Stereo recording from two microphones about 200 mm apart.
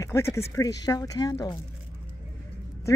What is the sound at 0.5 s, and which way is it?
Speech, 20° left (ahead or behind).